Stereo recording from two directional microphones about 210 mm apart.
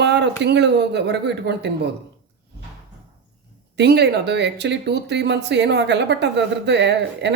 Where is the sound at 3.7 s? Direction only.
50° right (ahead or behind).